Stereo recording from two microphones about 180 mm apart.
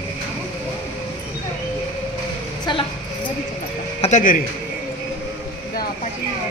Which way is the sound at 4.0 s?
40° left (ahead or behind).